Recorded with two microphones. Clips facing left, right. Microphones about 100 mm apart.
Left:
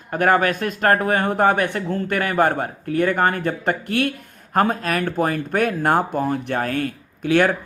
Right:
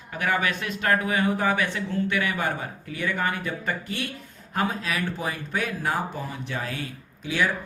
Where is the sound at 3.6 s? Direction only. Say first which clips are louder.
Left 9 dB; 60° left (ahead or behind).